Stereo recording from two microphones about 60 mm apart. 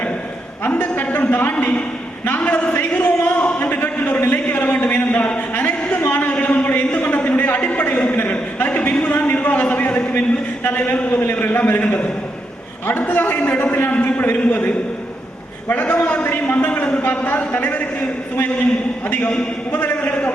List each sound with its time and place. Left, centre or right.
0.6 s a man's voice: left
6.3 s a sound: left
9.1 s a man's voice: left
10.8 s a man's voice: left
15.7 s a man's voice: left
19.1 s a man's voice: left
20.1 s a man's voice: left